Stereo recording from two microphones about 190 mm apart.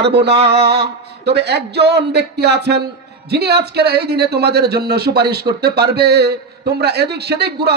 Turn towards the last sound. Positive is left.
turn(degrees=-60)  # may be behind; listen again after turning